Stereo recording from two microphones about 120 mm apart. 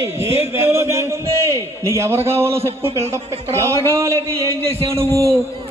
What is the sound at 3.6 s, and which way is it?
A man's voice, 20° right (ahead or behind).